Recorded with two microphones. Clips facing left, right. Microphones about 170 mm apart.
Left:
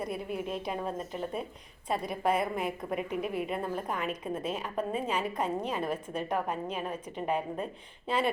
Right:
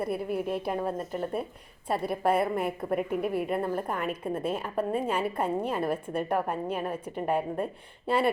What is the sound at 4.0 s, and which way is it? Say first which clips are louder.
Speech: right 3 dB; 55° right (ahead or behind).